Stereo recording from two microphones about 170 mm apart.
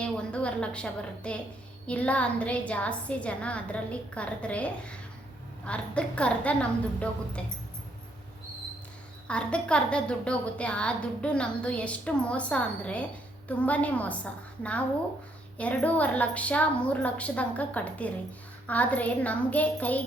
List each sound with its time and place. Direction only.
0.0 s a woman's voice: 5° left (ahead or behind)
9.2 s a woman's voice: 5° left (ahead or behind)
15.5 s a woman's voice: 10° left (ahead or behind)